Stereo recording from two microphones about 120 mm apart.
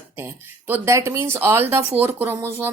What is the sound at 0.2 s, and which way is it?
A woman's voice, 20° right (ahead or behind).